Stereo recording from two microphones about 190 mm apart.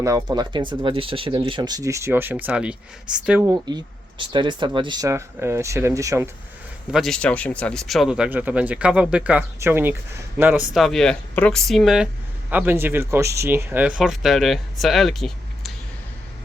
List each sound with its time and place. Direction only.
0.0 s speech: 20° right (ahead or behind)
3.4 s speech: 20° right (ahead or behind)
6.9 s speech: centre (ahead or behind)
10.8 s speech: centre (ahead or behind)